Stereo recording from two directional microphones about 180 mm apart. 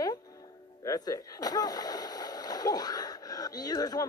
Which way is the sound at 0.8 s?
20° left (ahead or behind).